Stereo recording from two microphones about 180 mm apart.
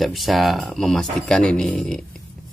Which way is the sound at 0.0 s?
Centre (ahead or behind).